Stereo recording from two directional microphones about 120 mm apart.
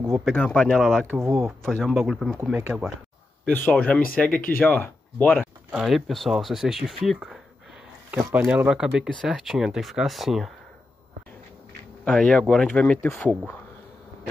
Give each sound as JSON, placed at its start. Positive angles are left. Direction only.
{"t": 0.2, "sound": "speech", "side_deg": 5}
{"t": 2.5, "sound": "speech", "side_deg": -10}
{"t": 3.4, "sound": "speech", "side_deg": 15}
{"t": 5.7, "sound": "speech", "side_deg": -5}
{"t": 8.1, "sound": "speech", "side_deg": -20}
{"t": 12.0, "sound": "speech", "side_deg": 5}